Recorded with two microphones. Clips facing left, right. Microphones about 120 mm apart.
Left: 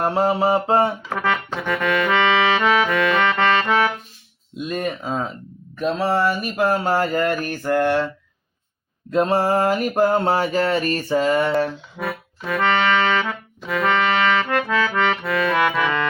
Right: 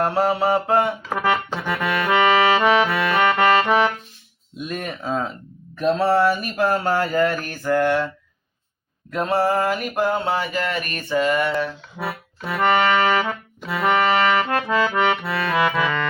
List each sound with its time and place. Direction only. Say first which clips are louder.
0.0 s mantra: left 1 dB; 20° left (ahead or behind)
1.1 s music: right 1 dB; 5° right (ahead or behind)
4.7 s speech: left 1 dB; 5° left (ahead or behind)
6.1 s mantra: right 1 dB; centre (ahead or behind); by 8.0 s 20° left (ahead or behind)
9.0 s mantra: left 2 dB; 25° left (ahead or behind)
11.9 s music: right 2 dB; 10° right (ahead or behind)
13.7 s accordion: right 1 dB; 10° right (ahead or behind)